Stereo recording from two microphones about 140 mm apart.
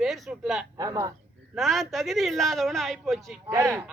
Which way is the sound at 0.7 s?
25° right (ahead or behind).